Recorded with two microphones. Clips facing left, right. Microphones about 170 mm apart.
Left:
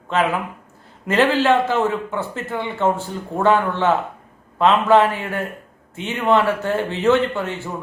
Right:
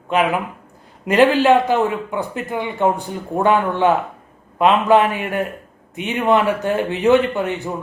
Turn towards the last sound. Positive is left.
turn(degrees=-15)  # may be behind; listen again after turning